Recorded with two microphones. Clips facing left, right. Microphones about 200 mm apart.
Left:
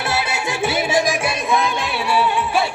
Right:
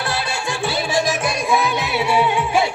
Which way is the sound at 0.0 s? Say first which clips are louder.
Left 2 dB; 20° left (ahead or behind).